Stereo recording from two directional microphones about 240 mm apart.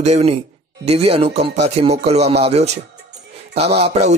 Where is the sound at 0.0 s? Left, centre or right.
Right.